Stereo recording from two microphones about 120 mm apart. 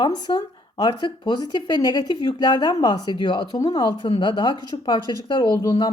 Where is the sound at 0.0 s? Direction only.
35° left (ahead or behind).